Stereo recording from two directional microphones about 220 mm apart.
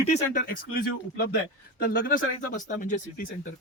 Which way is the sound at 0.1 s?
40° left (ahead or behind).